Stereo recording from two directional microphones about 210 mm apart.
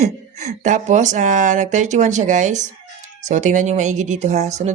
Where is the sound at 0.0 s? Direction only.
35° right (ahead or behind).